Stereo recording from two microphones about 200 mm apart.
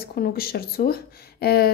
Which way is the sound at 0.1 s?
50° left (ahead or behind).